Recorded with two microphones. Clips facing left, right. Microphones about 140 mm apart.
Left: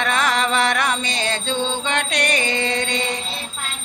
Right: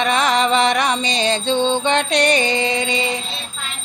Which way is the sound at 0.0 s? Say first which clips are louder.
Right 3 dB; 20° right (ahead or behind).